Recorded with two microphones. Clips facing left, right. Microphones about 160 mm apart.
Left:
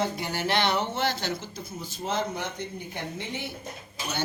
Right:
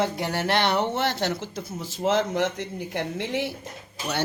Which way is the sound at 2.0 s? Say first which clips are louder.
Right 7 dB; 90° right.